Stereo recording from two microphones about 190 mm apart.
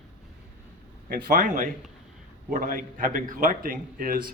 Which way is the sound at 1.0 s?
50° right (ahead or behind).